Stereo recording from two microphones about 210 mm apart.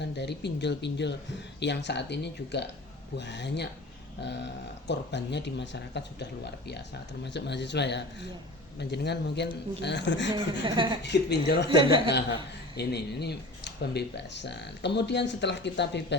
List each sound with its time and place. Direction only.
0.0 s speech: 55° left (ahead or behind)
4.9 s speech: 55° left (ahead or behind)
7.3 s speech: 55° left (ahead or behind)
10.3 s speech: 25° right (ahead or behind)
11.0 s speech: 55° left (ahead or behind)
11.7 s speech: 25° right (ahead or behind)
12.7 s speech: 50° left (ahead or behind)